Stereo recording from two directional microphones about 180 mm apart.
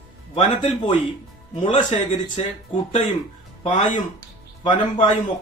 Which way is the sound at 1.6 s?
40° left (ahead or behind).